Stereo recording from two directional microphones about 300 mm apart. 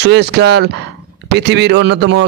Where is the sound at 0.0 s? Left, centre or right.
Right.